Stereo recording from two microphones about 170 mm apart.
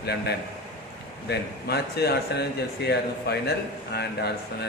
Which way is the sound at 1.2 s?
75° left (ahead or behind).